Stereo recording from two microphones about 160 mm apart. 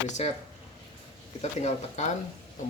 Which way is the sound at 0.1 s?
40° left (ahead or behind).